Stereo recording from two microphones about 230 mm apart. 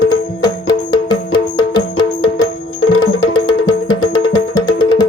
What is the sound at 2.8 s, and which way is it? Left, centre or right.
Music, left.